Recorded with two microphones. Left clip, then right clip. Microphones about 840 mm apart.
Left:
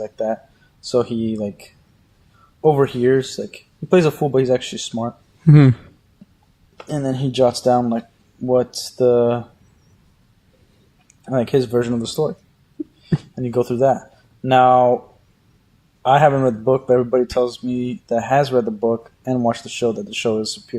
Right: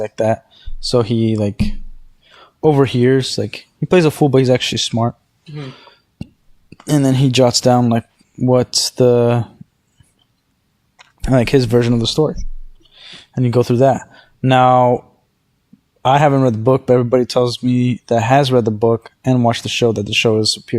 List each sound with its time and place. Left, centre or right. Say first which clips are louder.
0.0 s speech: right 6 dB; right
6.8 s speech: right 7 dB; right
11.2 s speech: right 4 dB; right
13.4 s speech: right 4 dB; right
16.0 s speech: right 1 dB; right